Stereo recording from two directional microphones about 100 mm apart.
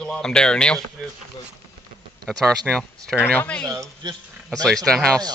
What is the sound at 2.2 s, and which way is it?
Speech, 5° left (ahead or behind).